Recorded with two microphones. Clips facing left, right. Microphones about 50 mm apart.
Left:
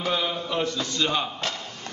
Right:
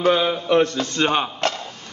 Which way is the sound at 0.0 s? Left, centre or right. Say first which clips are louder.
Right 8 dB; right.